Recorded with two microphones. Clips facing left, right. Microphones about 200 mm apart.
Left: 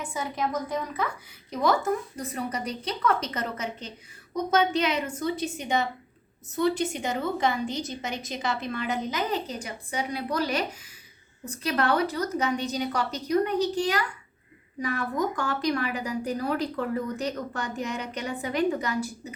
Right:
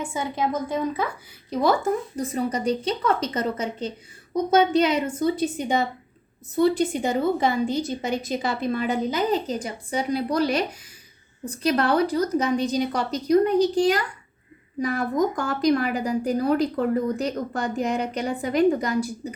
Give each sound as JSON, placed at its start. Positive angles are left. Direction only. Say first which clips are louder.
{"t": 0.0, "sound": "a woman's voice", "louder": "right 4 dB", "side_deg": -25}